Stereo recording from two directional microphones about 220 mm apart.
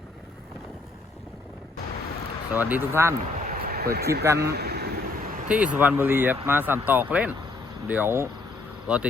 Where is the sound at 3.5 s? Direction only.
45° right (ahead or behind).